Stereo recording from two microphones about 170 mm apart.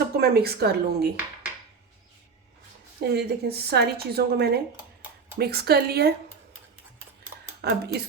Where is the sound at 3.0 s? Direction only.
70° right (ahead or behind).